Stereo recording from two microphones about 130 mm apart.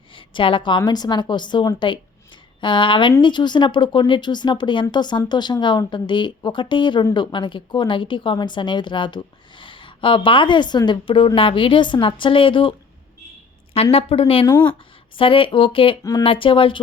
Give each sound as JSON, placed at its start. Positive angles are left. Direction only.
{"t": 0.1, "sound": "a woman's voice", "side_deg": 40}
{"t": 13.9, "sound": "speech", "side_deg": 45}
{"t": 14.4, "sound": "speech", "side_deg": 20}
{"t": 15.1, "sound": "a woman's voice", "side_deg": 40}